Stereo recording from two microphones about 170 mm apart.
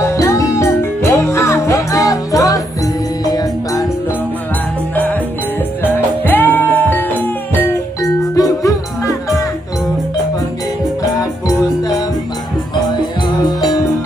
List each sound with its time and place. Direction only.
0.0 s music: 20° left (ahead or behind)
5.8 s music: 10° left (ahead or behind)
13.5 s music: 20° left (ahead or behind)